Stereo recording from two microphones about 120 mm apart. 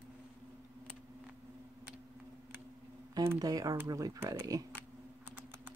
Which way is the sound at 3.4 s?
30° right (ahead or behind).